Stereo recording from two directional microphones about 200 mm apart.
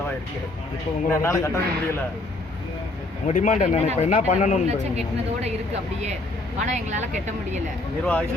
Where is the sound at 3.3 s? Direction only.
40° left (ahead or behind).